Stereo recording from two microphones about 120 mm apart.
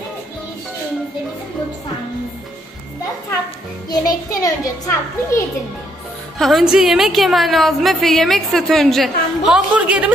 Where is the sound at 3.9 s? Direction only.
30° left (ahead or behind).